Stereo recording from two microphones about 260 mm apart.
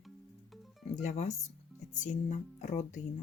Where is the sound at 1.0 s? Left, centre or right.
Left.